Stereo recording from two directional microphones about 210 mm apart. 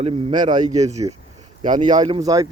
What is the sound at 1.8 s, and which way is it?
Speech, 20° right (ahead or behind).